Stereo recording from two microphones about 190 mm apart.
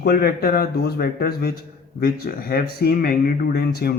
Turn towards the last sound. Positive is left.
turn(degrees=55)  # may be behind; listen again after turning